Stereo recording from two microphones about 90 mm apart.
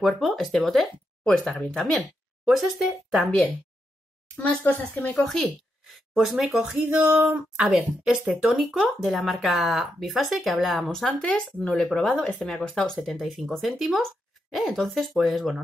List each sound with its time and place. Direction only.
0.0 s speech: centre (ahead or behind)
4.4 s speech: 20° left (ahead or behind)
5.9 s speech: centre (ahead or behind)
6.8 s speech: 20° right (ahead or behind)